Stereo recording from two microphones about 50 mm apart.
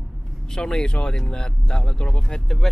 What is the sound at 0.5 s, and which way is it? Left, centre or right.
Speech, centre.